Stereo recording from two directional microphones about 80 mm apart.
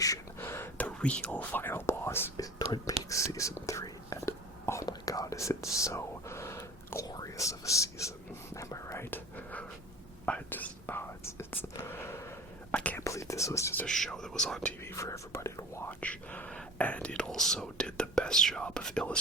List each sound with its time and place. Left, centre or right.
0.3 s a sound: left
0.8 s speech: centre; by 2.3 s left
2.4 s speech: left
3.1 s whispering: left
4.9 s whispering: left
7.0 s speech: left
8.5 s whispering: left
9.0 s whispering: left
12.7 s whispering: centre
13.0 s whispering: left
13.8 s speech: centre
14.8 s whispering: left
15.9 s speech: centre